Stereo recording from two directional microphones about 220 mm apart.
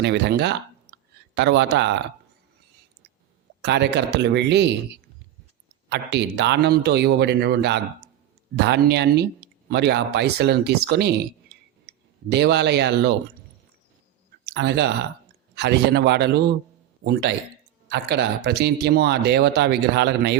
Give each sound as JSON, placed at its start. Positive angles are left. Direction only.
{"t": 0.0, "sound": "speech", "side_deg": -50}
{"t": 3.6, "sound": "speech", "side_deg": -50}
{"t": 5.9, "sound": "speech", "side_deg": -50}
{"t": 14.4, "sound": "speech", "side_deg": -50}